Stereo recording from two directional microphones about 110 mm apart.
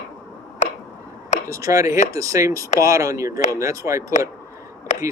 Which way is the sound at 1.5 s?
30° right (ahead or behind).